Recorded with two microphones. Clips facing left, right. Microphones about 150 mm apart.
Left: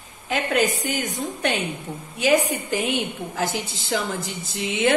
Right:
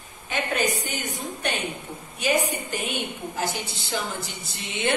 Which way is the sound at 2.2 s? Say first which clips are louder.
Left 4 dB; 90° left.